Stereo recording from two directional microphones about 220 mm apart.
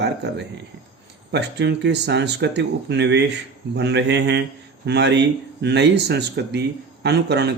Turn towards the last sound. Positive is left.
turn(degrees=-50)  # may be behind; listen again after turning